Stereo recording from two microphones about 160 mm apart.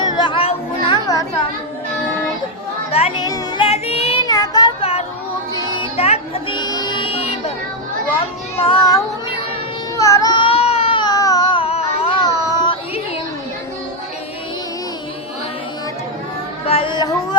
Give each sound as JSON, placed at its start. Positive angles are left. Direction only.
{"t": 0.0, "sound": "music", "side_deg": 25}
{"t": 1.0, "sound": "music", "side_deg": 20}
{"t": 3.2, "sound": "music", "side_deg": 25}
{"t": 3.7, "sound": "child singing", "side_deg": 40}
{"t": 4.2, "sound": "child singing", "side_deg": 25}
{"t": 4.8, "sound": "a sound", "side_deg": 40}
{"t": 5.7, "sound": "music", "side_deg": 35}
{"t": 6.6, "sound": "music", "side_deg": 25}
{"t": 8.5, "sound": "child singing", "side_deg": 35}
{"t": 10.0, "sound": "baby cry", "side_deg": 20}
{"t": 12.2, "sound": "child singing", "side_deg": 25}
{"t": 16.6, "sound": "a sound", "side_deg": 35}